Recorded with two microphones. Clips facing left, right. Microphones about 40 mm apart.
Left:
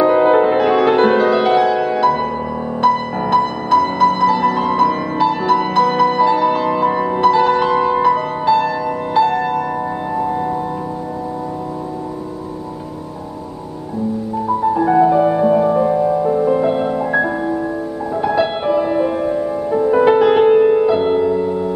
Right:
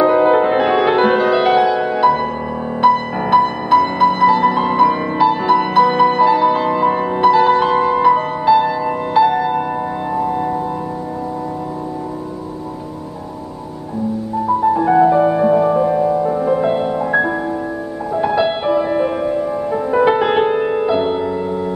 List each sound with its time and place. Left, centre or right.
0.0 s music: centre
0.5 s music: centre
8.5 s music: right
10.1 s music: centre
14.8 s music: centre